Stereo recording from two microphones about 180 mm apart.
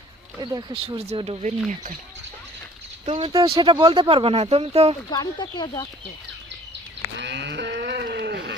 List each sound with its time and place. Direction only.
0.3 s speech: 25° right (ahead or behind)
3.2 s speech: 30° right (ahead or behind)
5.1 s speech: 25° left (ahead or behind)
7.2 s cattle: 75° right (ahead or behind)